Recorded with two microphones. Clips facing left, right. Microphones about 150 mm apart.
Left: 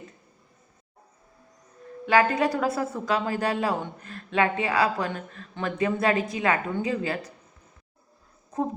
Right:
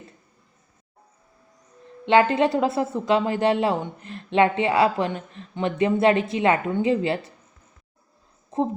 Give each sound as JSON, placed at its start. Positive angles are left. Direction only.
{"t": 2.0, "sound": "a woman's voice", "side_deg": -25}
{"t": 8.5, "sound": "a woman's voice", "side_deg": -25}